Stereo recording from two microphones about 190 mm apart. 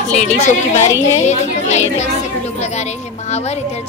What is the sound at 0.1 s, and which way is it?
A woman's voice, 40° left (ahead or behind).